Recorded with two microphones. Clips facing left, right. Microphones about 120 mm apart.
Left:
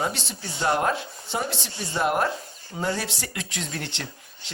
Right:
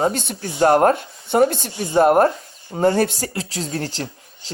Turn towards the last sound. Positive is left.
turn(degrees=-40)  # may be behind; listen again after turning